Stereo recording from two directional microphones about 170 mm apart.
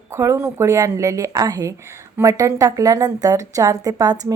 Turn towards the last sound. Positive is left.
turn(degrees=-20)  # may be behind; listen again after turning